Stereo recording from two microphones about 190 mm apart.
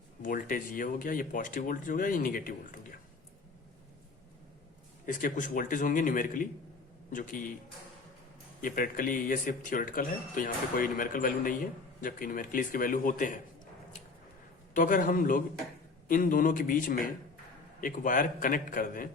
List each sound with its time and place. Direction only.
0.2 s speech: 45° left (ahead or behind)
5.0 s speech: 45° left (ahead or behind)
8.6 s speech: 45° left (ahead or behind)
14.7 s speech: 45° left (ahead or behind)